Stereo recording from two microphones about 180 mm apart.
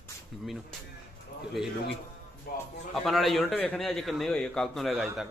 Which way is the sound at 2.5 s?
55° left (ahead or behind).